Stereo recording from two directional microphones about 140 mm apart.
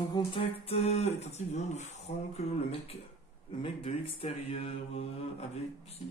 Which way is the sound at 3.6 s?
40° left (ahead or behind).